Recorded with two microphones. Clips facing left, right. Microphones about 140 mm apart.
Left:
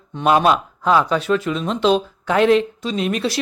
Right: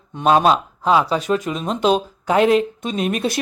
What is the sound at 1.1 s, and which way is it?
Speech, 40° right (ahead or behind).